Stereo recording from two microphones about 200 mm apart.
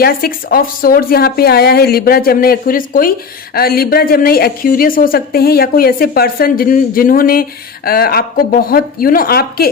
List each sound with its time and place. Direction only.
0.0 s a woman's voice: 45° left (ahead or behind)